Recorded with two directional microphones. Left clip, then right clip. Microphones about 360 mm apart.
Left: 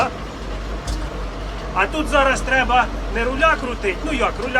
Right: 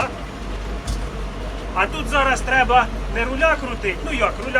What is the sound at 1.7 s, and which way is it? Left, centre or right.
Speech, centre.